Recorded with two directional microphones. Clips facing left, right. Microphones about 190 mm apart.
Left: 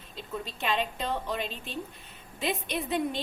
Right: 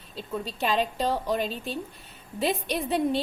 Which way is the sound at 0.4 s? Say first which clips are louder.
Right 4 dB; 40° right (ahead or behind).